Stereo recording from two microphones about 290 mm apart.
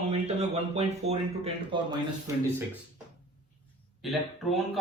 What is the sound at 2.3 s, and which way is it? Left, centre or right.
Speech, centre.